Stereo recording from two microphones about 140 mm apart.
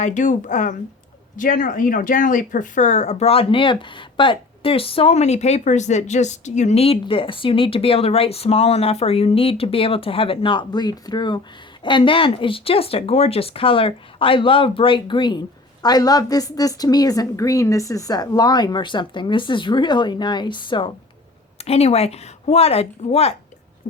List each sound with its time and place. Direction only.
0.0 s speech: 65° left (ahead or behind)
1.4 s speech: 75° left (ahead or behind); by 20.9 s 35° left (ahead or behind)
21.6 s speech: 45° left (ahead or behind)